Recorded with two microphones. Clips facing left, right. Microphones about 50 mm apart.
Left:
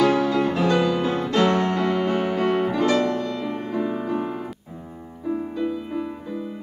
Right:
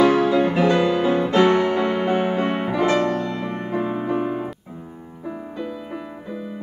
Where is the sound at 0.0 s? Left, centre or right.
Right.